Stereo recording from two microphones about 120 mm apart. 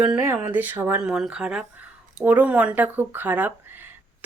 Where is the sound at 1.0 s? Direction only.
5° right (ahead or behind).